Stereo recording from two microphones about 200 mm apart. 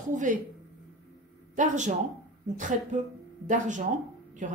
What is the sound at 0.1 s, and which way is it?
Speech, 40° right (ahead or behind).